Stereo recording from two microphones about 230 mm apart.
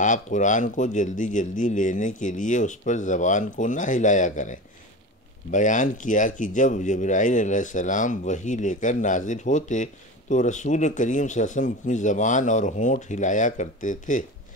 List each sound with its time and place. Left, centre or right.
0.0 s speech: left